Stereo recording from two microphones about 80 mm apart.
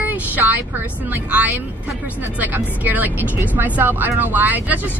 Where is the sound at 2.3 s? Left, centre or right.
Right.